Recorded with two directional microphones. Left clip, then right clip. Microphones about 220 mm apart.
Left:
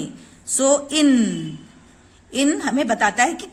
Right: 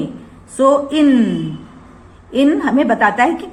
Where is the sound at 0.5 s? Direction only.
50° left (ahead or behind).